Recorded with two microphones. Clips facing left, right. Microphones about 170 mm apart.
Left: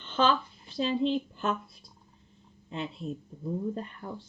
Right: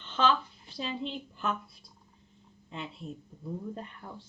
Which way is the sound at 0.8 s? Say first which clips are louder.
Left 9 dB; 30° left (ahead or behind).